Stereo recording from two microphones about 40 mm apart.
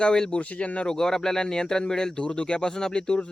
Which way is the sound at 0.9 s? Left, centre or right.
Centre.